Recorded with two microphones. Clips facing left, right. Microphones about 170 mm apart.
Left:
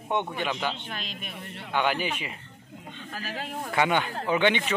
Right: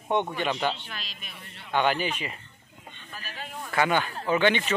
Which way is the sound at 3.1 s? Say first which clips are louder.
Left 6 dB; 90° left.